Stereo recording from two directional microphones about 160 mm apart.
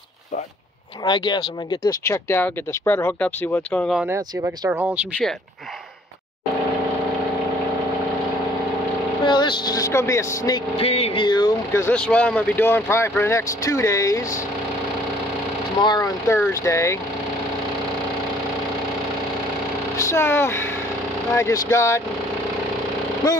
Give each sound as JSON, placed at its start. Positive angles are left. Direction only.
{"t": 1.0, "sound": "speech", "side_deg": 30}
{"t": 4.6, "sound": "speech", "side_deg": -10}
{"t": 9.2, "sound": "speech", "side_deg": 30}
{"t": 10.8, "sound": "a sound", "side_deg": 40}
{"t": 11.2, "sound": "speech", "side_deg": 25}
{"t": 15.8, "sound": "speech", "side_deg": 25}
{"t": 20.0, "sound": "speech", "side_deg": 15}